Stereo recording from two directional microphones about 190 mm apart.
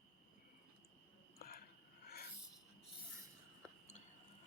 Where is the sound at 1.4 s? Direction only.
55° left (ahead or behind).